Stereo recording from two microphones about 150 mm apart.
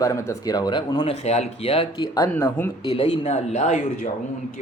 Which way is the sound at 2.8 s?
40° left (ahead or behind).